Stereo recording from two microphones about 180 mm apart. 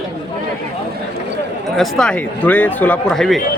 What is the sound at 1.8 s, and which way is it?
A man's voice, 5° left (ahead or behind).